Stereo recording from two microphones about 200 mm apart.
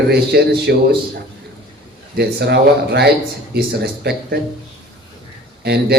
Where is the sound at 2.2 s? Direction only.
55° right (ahead or behind).